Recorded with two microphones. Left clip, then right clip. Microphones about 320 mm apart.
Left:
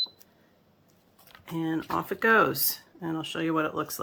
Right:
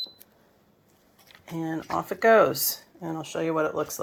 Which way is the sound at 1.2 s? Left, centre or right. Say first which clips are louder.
Left 1 dB; left.